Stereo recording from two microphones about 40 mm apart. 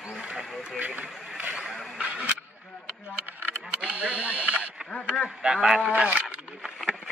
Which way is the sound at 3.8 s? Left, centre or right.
Right.